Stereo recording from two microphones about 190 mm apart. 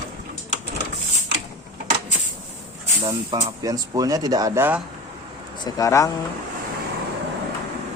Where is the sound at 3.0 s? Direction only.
25° right (ahead or behind).